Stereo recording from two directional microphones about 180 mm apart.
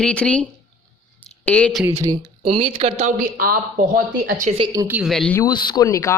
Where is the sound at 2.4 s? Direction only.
30° right (ahead or behind); by 4.5 s 50° right (ahead or behind).